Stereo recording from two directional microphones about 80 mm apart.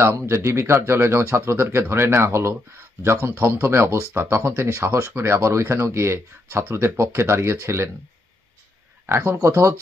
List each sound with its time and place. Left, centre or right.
0.0 s speech: right
9.1 s speech: right